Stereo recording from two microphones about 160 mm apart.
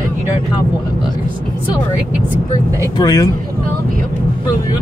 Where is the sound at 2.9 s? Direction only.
25° left (ahead or behind).